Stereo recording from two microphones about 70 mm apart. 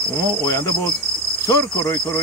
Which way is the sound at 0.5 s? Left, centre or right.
Left.